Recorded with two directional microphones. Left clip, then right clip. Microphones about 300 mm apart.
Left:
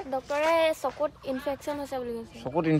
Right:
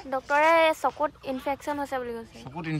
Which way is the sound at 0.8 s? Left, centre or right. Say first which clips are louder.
Right 3 dB; right.